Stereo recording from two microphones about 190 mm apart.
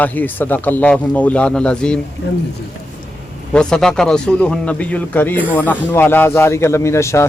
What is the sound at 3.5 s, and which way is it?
A man's voice, 5° left (ahead or behind).